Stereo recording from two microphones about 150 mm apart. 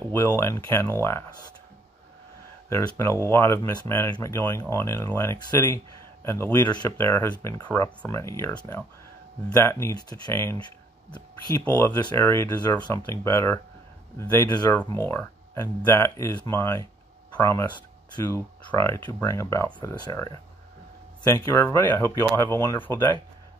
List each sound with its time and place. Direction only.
0.1 s speech: 15° left (ahead or behind)
2.7 s speech: 15° left (ahead or behind)
21.6 s speech: 15° left (ahead or behind)